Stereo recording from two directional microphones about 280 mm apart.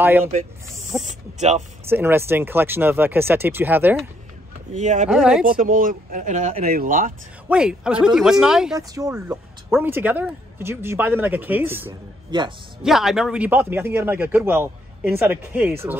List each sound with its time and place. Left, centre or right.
0.0 s speech: centre
1.0 s speech: right
1.9 s speech: centre
4.7 s speech: right
5.1 s speech: centre
5.4 s speech: right
7.4 s speech: centre
12.8 s speech: centre